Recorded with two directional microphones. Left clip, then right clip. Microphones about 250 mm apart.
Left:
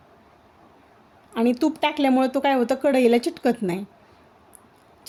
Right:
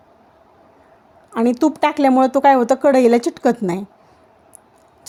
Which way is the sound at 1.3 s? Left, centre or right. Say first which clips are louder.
Right 5 dB; centre.